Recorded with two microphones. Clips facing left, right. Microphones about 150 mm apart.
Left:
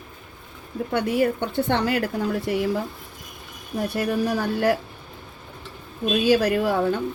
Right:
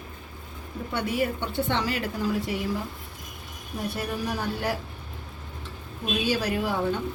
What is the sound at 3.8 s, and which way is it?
Speech, 65° left (ahead or behind).